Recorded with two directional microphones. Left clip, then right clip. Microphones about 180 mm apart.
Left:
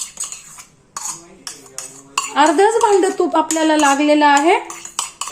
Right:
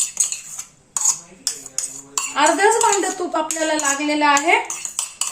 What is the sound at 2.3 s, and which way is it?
Cutlery, 55° left (ahead or behind).